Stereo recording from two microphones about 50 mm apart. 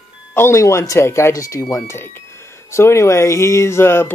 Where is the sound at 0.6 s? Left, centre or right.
Left.